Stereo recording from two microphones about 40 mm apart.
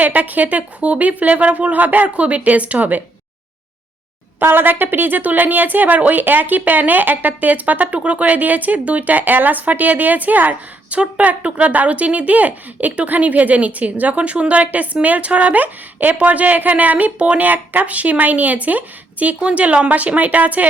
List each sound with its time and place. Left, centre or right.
0.0 s speech: right
4.4 s speech: right